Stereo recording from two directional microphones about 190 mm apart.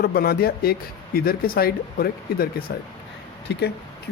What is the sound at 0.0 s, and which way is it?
Speech, 55° left (ahead or behind).